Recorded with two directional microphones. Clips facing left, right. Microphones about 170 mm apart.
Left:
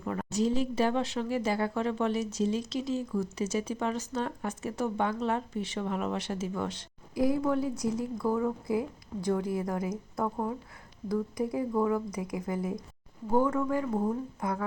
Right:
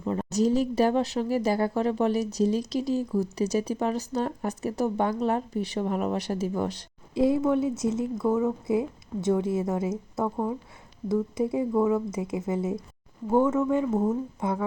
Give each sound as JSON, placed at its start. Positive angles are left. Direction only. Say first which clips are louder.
{"t": 0.0, "sound": "a sound", "louder": "right 5 dB", "side_deg": -25}
{"t": 0.3, "sound": "speech", "louder": "right 4 dB", "side_deg": -40}
{"t": 7.1, "sound": "speech", "louder": "right 4 dB", "side_deg": -25}